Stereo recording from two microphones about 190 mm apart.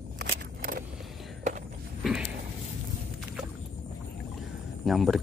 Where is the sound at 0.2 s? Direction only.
50° right (ahead or behind).